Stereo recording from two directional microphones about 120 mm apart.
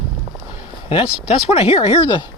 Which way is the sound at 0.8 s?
50° left (ahead or behind).